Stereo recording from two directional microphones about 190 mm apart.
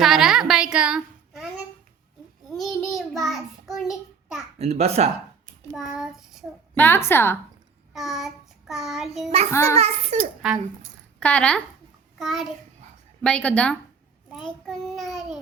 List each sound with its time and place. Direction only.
0.0 s a sound: centre (ahead or behind)
2.5 s child singing: centre (ahead or behind)
4.5 s a child's voice: 35° right (ahead or behind)
5.7 s child singing: centre (ahead or behind)
6.7 s a woman's voice: 10° left (ahead or behind)
7.9 s child singing: centre (ahead or behind)
9.5 s a woman's voice: 15° left (ahead or behind)
9.7 s a child's voice: 35° right (ahead or behind)
11.2 s a woman's voice: 5° left (ahead or behind)
12.2 s child singing: centre (ahead or behind)